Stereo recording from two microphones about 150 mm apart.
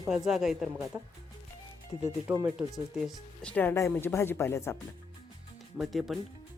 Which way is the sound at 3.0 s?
5° left (ahead or behind).